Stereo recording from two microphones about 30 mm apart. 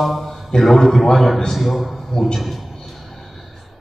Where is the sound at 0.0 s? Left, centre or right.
Centre.